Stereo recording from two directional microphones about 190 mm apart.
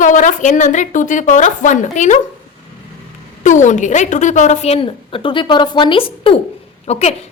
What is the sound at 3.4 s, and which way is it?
A woman's voice, 40° left (ahead or behind).